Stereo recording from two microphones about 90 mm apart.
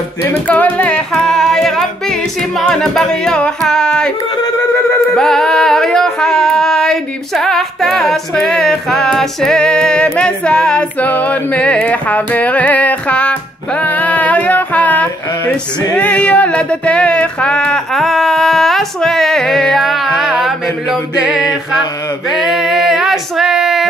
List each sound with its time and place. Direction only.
0.2 s singing: 20° left (ahead or behind)
5.1 s a sound: 5° left (ahead or behind)
10.1 s music: 10° left (ahead or behind)
17.9 s music: centre (ahead or behind)
22.3 s music: 5° right (ahead or behind)